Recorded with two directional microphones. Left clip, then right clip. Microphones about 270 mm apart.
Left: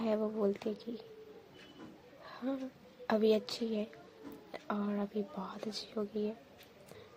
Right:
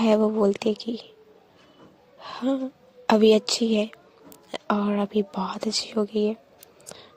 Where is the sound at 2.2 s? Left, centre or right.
Right.